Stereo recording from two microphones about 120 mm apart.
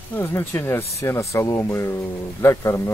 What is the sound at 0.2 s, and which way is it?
Speech, 20° left (ahead or behind).